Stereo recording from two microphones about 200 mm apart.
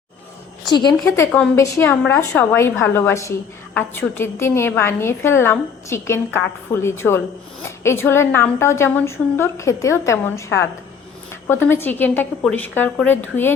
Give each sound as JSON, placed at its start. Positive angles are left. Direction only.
{"t": 0.7, "sound": "a woman's voice", "side_deg": 20}
{"t": 1.2, "sound": "a woman's voice", "side_deg": 10}